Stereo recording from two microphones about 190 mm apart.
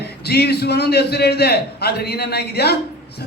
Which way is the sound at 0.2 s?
60° left (ahead or behind).